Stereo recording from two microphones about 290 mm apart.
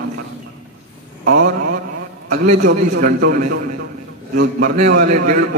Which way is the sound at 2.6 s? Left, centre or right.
Right.